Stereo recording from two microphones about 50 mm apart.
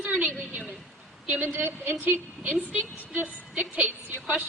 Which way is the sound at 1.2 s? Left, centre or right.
Right.